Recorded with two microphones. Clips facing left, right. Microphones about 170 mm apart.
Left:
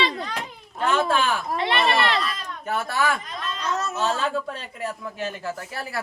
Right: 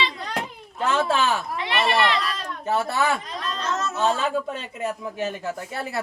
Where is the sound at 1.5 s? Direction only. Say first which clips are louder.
Left 3 dB; 35° left (ahead or behind).